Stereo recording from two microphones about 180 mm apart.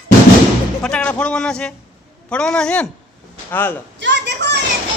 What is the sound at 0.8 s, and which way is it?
Speech, 5° left (ahead or behind).